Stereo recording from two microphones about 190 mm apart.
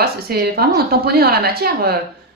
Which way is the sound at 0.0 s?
55° right (ahead or behind).